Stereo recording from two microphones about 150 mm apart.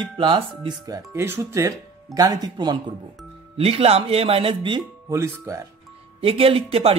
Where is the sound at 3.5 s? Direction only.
40° right (ahead or behind).